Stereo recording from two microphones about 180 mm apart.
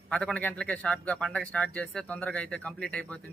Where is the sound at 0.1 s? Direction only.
5° left (ahead or behind).